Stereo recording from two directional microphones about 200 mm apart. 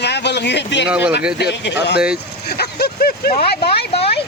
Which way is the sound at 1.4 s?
60° left (ahead or behind).